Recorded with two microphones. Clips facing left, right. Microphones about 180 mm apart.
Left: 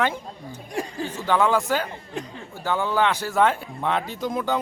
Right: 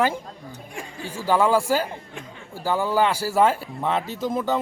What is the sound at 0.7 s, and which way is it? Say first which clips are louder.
Speech: left 8 dB; 35° left (ahead or behind).